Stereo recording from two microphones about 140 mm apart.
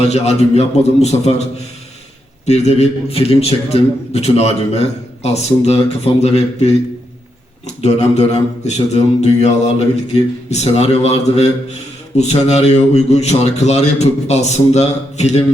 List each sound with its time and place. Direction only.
0.0 s speech: 50° left (ahead or behind)
2.5 s speech: 50° left (ahead or behind)
7.8 s speech: 55° left (ahead or behind)